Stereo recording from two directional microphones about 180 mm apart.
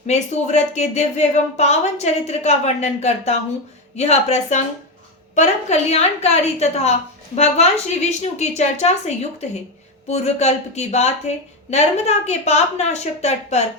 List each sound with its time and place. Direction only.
0.1 s speech: 40° left (ahead or behind)